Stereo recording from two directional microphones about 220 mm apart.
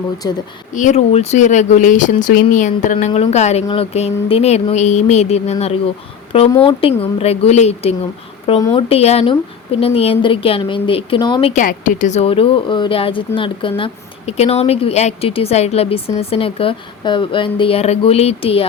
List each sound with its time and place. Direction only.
0.2 s a woman's voice: 15° left (ahead or behind)
0.7 s speech: 35° left (ahead or behind)
11.6 s speech: 35° left (ahead or behind)